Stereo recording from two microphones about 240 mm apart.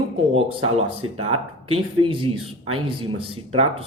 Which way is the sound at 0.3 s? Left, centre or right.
Right.